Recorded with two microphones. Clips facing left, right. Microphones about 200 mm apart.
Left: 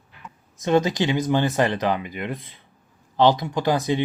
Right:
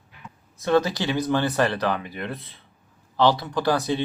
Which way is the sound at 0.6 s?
15° left (ahead or behind).